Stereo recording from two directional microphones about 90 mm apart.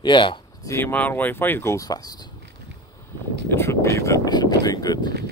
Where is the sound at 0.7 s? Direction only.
25° left (ahead or behind); by 2.1 s 45° left (ahead or behind).